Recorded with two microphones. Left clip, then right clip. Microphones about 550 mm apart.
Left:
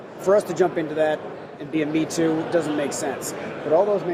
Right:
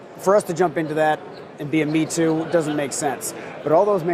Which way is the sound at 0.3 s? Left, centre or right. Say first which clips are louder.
Right 1 dB; right.